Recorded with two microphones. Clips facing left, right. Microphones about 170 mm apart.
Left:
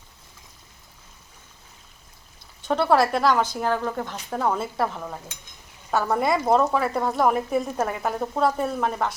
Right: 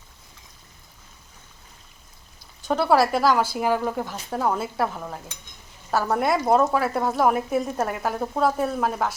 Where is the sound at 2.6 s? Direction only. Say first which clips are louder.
Even; centre (ahead or behind).